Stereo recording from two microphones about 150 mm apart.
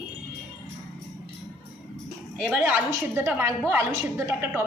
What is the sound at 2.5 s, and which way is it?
A woman's voice, 15° right (ahead or behind).